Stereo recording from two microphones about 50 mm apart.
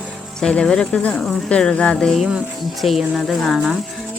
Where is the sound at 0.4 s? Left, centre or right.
Centre.